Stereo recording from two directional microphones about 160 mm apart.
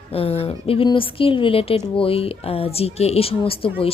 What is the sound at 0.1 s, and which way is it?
A woman's voice, 35° left (ahead or behind).